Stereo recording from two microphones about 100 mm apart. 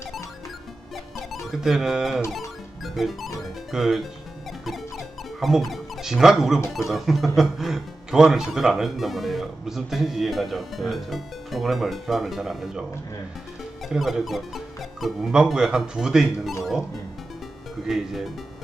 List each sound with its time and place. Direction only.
1.3 s speech: centre (ahead or behind)
2.8 s music: centre (ahead or behind)
3.7 s speech: 5° right (ahead or behind)
4.6 s music: centre (ahead or behind)
6.7 s speech: centre (ahead or behind)
13.9 s speech: centre (ahead or behind)
17.8 s speech: centre (ahead or behind)